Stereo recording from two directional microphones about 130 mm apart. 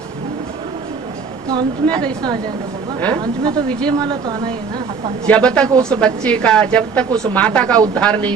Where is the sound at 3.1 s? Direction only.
30° right (ahead or behind).